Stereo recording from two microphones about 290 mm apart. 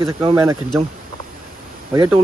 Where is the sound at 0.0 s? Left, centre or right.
Centre.